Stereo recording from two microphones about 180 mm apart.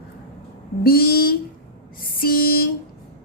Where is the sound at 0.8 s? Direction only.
60° left (ahead or behind).